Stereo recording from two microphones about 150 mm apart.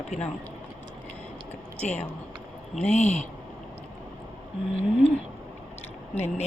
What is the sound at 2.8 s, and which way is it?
Speech, 50° left (ahead or behind).